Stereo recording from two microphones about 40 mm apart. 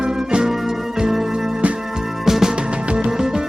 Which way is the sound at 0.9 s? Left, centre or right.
Centre.